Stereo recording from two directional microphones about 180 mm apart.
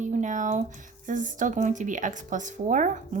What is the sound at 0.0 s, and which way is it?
Speech, 40° right (ahead or behind).